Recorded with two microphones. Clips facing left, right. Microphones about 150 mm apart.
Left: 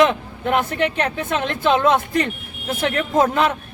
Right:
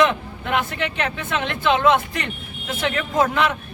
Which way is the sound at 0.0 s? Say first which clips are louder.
Left 2 dB; 45° left (ahead or behind).